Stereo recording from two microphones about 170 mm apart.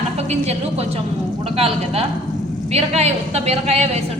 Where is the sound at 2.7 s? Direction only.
40° right (ahead or behind).